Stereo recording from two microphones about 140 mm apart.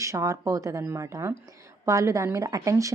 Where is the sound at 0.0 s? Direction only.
20° right (ahead or behind).